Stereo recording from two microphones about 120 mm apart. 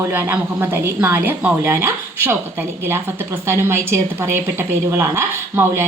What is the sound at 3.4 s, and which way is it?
A woman's voice, 20° right (ahead or behind).